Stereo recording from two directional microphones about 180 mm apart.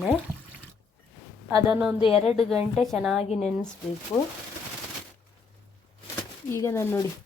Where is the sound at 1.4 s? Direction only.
10° right (ahead or behind).